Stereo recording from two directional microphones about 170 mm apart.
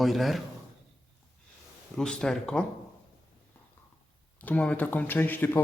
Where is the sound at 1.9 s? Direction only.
5° left (ahead or behind).